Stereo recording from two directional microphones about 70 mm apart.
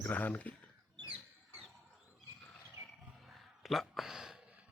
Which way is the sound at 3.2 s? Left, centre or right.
Centre.